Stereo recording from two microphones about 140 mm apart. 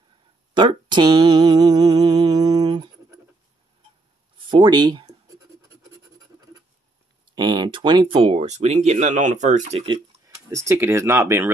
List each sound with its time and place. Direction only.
0.6 s a sound: 35° right (ahead or behind)
4.4 s writing: 35° right (ahead or behind)
7.3 s speech: 30° right (ahead or behind); by 9.8 s 55° right (ahead or behind)
10.5 s speech: 20° right (ahead or behind)